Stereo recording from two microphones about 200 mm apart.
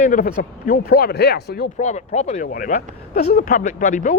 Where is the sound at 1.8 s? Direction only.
35° left (ahead or behind).